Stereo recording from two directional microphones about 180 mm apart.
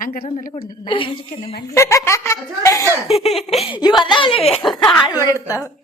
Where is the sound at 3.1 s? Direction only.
35° left (ahead or behind).